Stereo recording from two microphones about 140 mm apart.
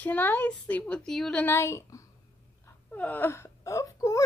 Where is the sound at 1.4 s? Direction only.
20° left (ahead or behind).